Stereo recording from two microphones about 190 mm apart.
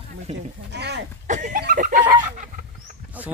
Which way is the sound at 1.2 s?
40° right (ahead or behind).